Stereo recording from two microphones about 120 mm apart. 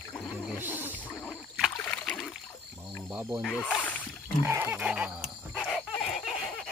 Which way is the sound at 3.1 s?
10° right (ahead or behind).